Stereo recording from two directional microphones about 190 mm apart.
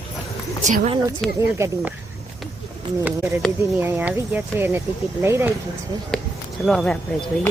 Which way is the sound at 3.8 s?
10° right (ahead or behind).